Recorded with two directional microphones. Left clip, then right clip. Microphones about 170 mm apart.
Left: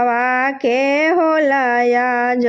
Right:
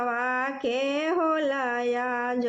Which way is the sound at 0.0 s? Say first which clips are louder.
Left 11 dB; 35° left (ahead or behind).